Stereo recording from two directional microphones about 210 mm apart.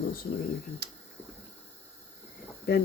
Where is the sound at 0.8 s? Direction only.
50° right (ahead or behind).